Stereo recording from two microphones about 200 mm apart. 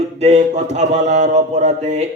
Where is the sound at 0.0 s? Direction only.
35° right (ahead or behind).